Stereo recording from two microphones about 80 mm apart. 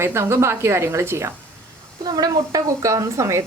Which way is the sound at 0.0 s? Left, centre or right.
Right.